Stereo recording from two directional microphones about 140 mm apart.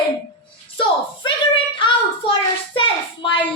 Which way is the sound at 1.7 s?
35° left (ahead or behind).